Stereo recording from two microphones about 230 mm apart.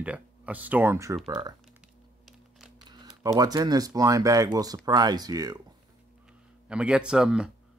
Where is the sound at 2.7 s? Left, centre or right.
Centre.